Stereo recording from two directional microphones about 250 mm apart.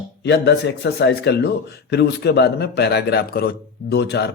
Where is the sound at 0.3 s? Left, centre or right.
Left.